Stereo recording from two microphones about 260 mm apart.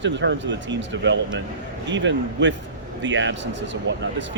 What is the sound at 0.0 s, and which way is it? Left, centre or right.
A man's voice, right.